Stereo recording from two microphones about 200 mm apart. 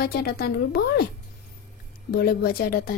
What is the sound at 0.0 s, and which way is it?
Speech, 50° left (ahead or behind).